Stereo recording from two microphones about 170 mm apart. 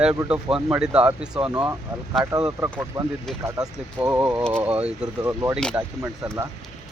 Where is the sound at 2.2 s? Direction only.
20° right (ahead or behind).